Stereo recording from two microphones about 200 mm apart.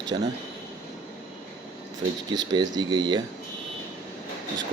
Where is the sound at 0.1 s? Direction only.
20° right (ahead or behind).